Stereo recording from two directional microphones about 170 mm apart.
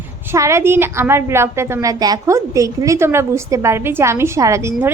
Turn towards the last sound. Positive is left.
turn(degrees=-20)  # may be behind; listen again after turning